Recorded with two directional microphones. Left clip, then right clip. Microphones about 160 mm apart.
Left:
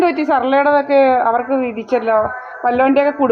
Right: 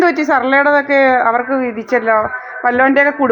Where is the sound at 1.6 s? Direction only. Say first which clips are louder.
Right 1 dB; 65° right (ahead or behind).